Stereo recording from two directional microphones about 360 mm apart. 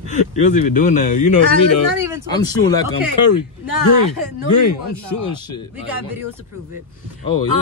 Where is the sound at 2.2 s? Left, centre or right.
Centre.